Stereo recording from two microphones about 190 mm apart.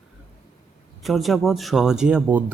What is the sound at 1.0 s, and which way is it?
A man's voice, centre (ahead or behind).